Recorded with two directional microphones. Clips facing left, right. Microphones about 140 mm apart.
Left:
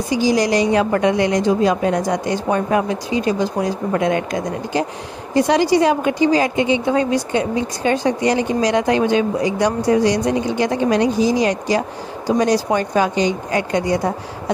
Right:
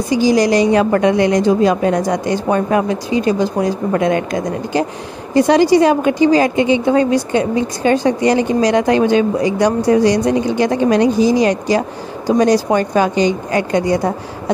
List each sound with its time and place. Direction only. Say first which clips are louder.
0.3 s a woman's voice: right 4 dB; 50° right (ahead or behind)
3.9 s a woman's voice: right 2 dB; 50° right (ahead or behind)